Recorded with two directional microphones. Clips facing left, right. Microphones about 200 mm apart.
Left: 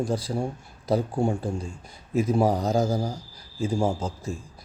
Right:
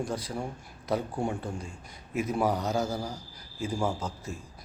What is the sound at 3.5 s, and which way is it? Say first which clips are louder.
Speech: left 5 dB; 30° left (ahead or behind).